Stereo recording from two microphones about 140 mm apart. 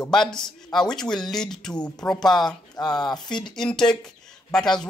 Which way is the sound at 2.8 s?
30° left (ahead or behind).